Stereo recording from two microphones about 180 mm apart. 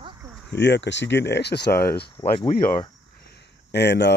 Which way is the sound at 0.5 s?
80° left.